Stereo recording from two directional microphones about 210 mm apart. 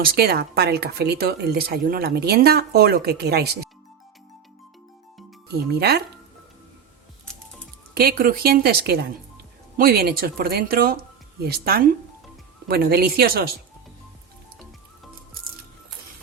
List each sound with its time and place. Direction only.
0.0 s speech: 45° right (ahead or behind)
5.5 s speech: 50° right (ahead or behind)
7.9 s speech: 45° right (ahead or behind)